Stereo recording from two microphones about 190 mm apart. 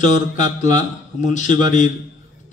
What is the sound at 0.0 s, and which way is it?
A man's voice, 40° left (ahead or behind).